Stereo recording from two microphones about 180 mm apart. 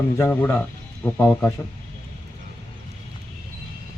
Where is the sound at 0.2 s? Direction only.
15° left (ahead or behind).